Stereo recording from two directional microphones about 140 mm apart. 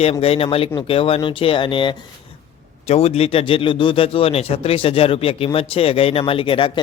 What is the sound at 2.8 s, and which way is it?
A man's voice, 50° left (ahead or behind).